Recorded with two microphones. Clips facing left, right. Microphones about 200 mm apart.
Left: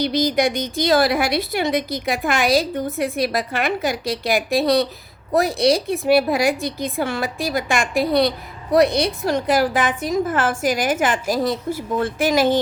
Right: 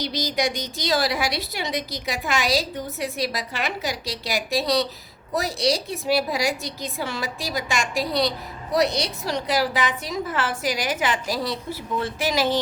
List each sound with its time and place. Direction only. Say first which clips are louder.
0.0 s a woman's voice: left 7 dB; 55° left (ahead or behind)